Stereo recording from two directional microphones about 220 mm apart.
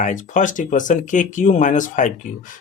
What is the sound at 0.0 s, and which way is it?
Speech, 35° left (ahead or behind).